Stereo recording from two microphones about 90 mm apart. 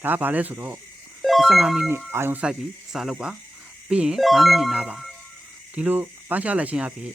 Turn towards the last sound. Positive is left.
turn(degrees=-15)  # may be behind; listen again after turning